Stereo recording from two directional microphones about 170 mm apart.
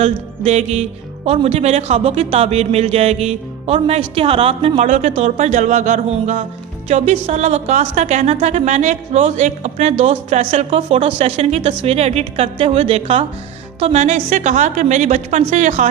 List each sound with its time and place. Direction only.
0.0 s a woman's voice: 40° right (ahead or behind)